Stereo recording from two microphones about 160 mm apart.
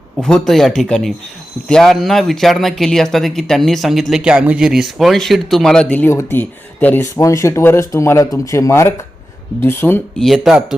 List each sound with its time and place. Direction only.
0.2 s speech: 5° left (ahead or behind)
10.2 s speech: centre (ahead or behind)